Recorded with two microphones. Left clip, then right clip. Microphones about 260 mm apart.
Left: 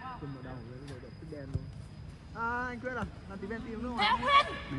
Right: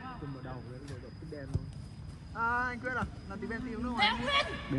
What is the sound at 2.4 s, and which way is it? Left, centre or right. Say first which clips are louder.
Vehicle: right 3 dB; right.